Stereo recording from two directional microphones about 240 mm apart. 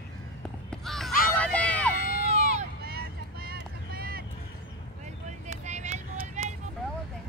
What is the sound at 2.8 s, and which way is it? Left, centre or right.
Vehicle, right.